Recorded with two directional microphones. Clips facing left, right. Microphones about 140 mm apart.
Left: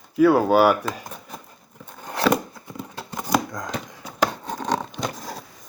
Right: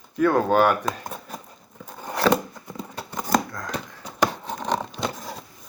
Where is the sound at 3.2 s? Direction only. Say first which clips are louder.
Even; 15° left (ahead or behind).